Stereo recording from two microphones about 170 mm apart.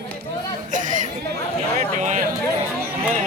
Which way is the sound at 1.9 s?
45° right (ahead or behind).